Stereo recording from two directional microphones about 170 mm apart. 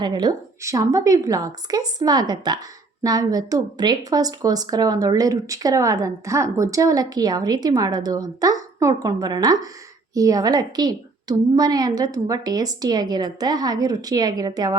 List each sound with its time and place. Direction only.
0.0 s a woman's voice: 25° right (ahead or behind)